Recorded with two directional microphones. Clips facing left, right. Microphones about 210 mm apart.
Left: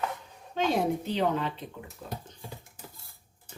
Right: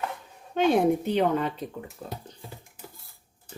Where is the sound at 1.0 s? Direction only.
50° right (ahead or behind).